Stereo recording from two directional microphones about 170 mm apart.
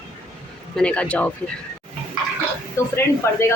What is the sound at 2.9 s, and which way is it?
Speech, 15° left (ahead or behind).